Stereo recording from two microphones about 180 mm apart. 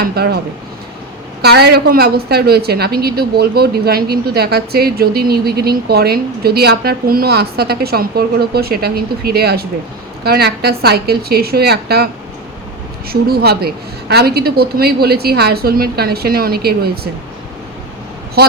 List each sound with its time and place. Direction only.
0.0 s a woman's voice: 60° right (ahead or behind)
1.4 s a woman's voice: 60° right (ahead or behind)
13.1 s a woman's voice: 60° right (ahead or behind)